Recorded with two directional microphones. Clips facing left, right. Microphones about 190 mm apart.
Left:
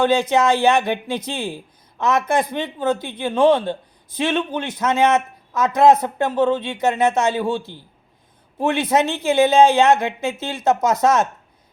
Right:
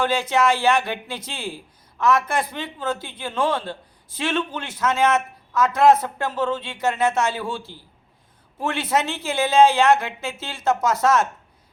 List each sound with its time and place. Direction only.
0.0 s speech: 20° left (ahead or behind)